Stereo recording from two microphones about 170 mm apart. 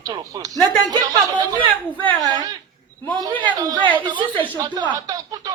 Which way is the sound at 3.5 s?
25° right (ahead or behind).